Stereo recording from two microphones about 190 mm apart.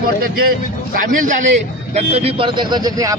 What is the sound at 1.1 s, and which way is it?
Speech, 45° right (ahead or behind).